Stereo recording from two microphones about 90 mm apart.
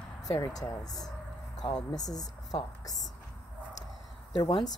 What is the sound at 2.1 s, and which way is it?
Speech, 45° left (ahead or behind).